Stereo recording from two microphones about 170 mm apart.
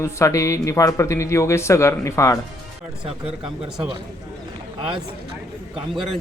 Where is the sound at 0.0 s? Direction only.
15° left (ahead or behind).